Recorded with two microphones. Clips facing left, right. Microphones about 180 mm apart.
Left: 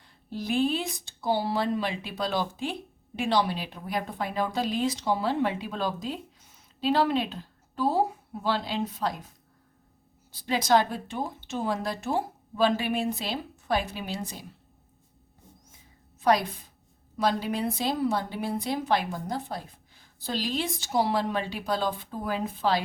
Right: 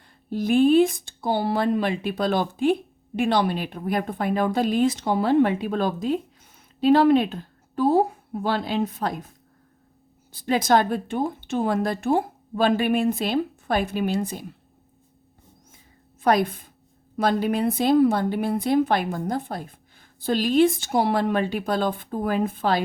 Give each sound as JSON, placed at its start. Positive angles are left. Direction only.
{"t": 0.3, "sound": "speech", "side_deg": -50}
{"t": 10.3, "sound": "speech", "side_deg": -50}
{"t": 16.2, "sound": "a woman's voice", "side_deg": -55}